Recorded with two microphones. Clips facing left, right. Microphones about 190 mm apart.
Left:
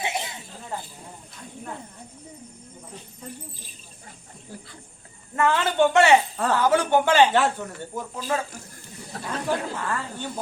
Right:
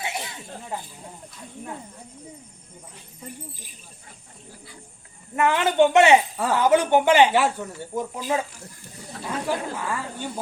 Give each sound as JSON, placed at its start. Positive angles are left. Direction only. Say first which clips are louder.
{"t": 0.0, "sound": "a sound", "louder": "left 2 dB", "side_deg": 20}
{"t": 0.7, "sound": "speech", "louder": "even", "side_deg": -15}
{"t": 5.4, "sound": "speech", "louder": "right 2 dB", "side_deg": -15}
{"t": 6.3, "sound": "speech", "louder": "even", "side_deg": -10}
{"t": 6.6, "sound": "speech", "louder": "right 3 dB", "side_deg": -20}